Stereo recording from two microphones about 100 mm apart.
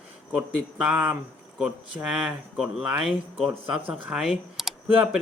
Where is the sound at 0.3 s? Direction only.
10° right (ahead or behind).